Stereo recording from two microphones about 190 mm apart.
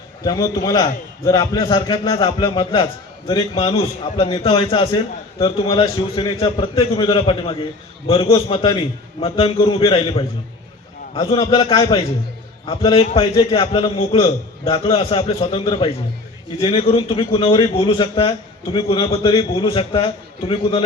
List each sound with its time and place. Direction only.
0.3 s a man's voice: 20° left (ahead or behind)